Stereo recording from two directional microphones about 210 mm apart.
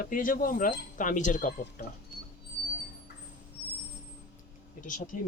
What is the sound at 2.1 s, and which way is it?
Train, 40° left (ahead or behind).